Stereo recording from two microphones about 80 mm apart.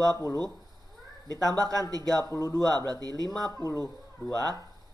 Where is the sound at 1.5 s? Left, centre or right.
Right.